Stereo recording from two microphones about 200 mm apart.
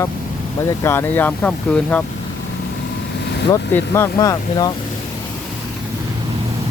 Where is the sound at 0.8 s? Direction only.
10° left (ahead or behind).